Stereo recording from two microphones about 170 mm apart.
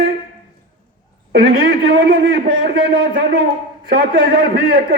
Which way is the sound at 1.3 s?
75° right (ahead or behind).